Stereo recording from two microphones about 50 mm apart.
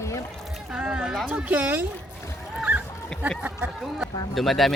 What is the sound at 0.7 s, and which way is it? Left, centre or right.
Speech, centre.